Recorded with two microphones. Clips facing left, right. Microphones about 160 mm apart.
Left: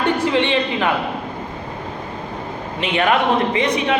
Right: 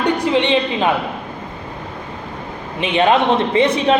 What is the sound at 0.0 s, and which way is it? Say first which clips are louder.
Speech: right 1 dB; 15° right (ahead or behind).